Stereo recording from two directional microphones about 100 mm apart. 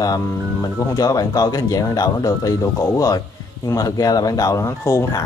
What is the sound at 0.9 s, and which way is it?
Speech, 35° left (ahead or behind).